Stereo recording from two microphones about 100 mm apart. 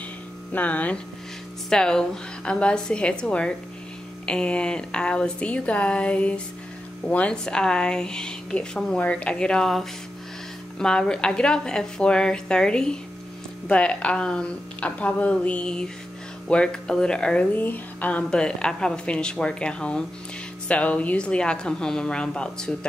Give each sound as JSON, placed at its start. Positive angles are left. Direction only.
{"t": 0.5, "sound": "a woman's voice", "side_deg": 15}